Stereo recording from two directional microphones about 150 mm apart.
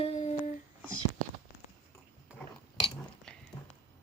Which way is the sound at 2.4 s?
5° left (ahead or behind).